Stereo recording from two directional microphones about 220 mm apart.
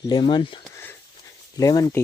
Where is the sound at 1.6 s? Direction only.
15° left (ahead or behind).